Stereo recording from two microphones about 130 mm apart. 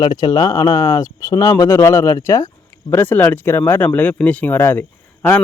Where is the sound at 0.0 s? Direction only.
30° left (ahead or behind).